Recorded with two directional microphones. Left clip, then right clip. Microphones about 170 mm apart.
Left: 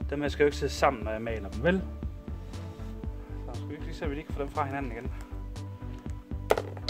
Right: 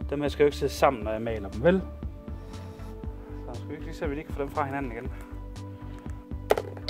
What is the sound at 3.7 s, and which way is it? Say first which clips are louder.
Speech: right 3 dB; 40° right (ahead or behind).